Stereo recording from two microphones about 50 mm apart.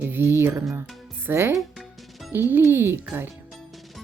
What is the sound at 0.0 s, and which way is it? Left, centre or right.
Speech, right.